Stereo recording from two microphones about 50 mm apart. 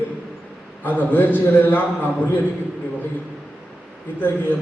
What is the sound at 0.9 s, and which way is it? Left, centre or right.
A man's voice, left.